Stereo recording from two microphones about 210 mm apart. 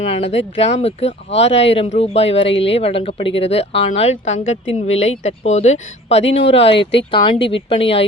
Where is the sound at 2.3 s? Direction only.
60° left (ahead or behind).